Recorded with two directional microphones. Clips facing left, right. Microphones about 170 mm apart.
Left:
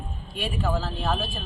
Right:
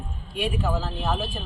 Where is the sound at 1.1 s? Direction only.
15° right (ahead or behind).